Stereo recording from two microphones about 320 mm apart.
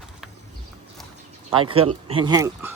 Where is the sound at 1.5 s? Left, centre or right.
Centre.